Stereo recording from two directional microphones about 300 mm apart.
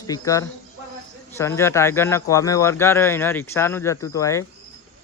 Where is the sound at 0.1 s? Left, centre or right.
Centre.